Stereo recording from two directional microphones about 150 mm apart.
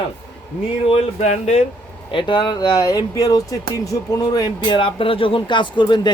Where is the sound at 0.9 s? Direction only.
45° left (ahead or behind).